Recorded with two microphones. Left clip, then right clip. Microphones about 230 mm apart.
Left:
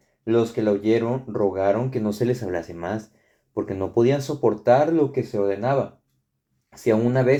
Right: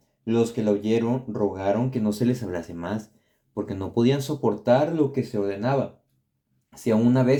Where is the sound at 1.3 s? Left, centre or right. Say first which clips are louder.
Left 5 dB; left.